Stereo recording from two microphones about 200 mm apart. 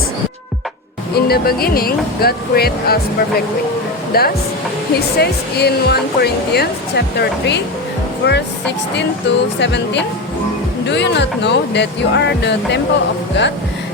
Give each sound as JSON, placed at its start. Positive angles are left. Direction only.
{"t": 1.1, "sound": "speech", "side_deg": 50}
{"t": 9.6, "sound": "speech", "side_deg": 60}